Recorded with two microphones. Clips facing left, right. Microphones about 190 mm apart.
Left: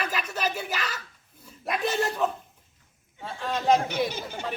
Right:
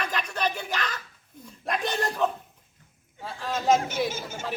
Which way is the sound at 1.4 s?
5° left (ahead or behind).